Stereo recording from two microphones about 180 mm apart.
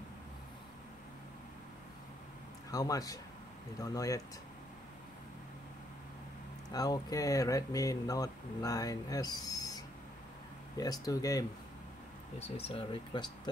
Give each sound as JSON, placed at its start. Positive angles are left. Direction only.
{"t": 2.7, "sound": "speech", "side_deg": 20}
{"t": 6.7, "sound": "speech", "side_deg": 20}
{"t": 12.4, "sound": "speech", "side_deg": 35}